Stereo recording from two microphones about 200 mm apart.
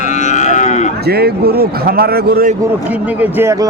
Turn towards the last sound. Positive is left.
turn(degrees=-15)  # may be behind; listen again after turning